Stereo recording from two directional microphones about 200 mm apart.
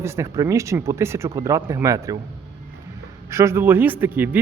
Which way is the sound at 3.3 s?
15° right (ahead or behind).